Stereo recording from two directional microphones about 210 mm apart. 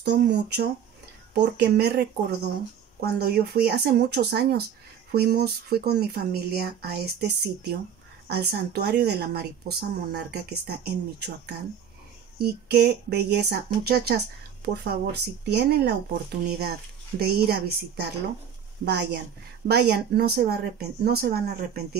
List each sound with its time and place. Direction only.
0.0 s speech: 55° right (ahead or behind)